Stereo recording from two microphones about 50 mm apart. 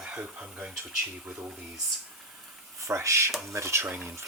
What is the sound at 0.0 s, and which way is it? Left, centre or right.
Speech, right.